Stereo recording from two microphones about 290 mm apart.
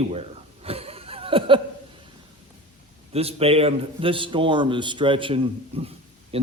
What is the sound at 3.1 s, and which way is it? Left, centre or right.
A man's voice, centre.